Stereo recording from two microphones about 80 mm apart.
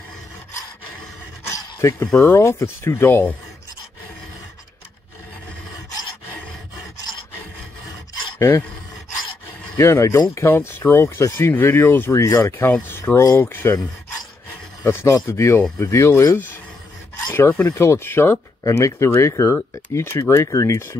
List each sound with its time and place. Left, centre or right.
1.5 s a sound: left
2.2 s speech: left
8.4 s speech: left
9.8 s speech: left
13.3 s speech: left
14.9 s speech: left
18.6 s speech: left